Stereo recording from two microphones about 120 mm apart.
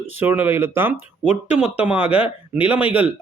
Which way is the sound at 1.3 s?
70° left (ahead or behind).